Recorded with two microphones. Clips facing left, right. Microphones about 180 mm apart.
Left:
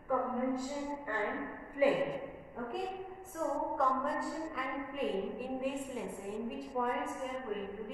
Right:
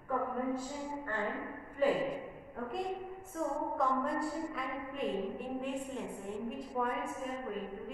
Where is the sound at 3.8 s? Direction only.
Centre (ahead or behind).